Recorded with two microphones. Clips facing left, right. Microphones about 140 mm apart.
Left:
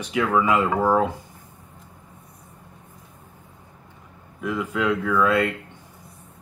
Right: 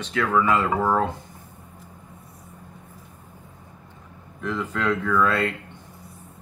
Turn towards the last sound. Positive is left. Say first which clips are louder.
# left 2 dB
turn(degrees=10)  # may be behind; listen again after turning